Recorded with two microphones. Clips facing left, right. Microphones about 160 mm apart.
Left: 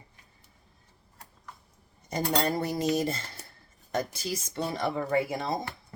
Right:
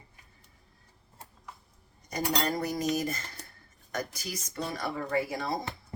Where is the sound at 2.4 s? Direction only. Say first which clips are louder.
Left 2 dB; 30° left (ahead or behind).